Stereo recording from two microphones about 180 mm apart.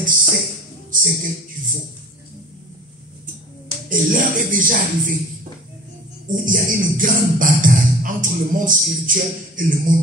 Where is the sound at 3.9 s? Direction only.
50° right (ahead or behind).